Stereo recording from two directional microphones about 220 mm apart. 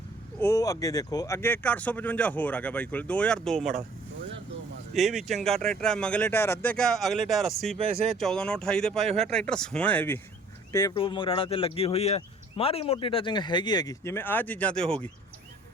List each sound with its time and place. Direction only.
0.3 s speech: 15° left (ahead or behind)
4.9 s speech: centre (ahead or behind)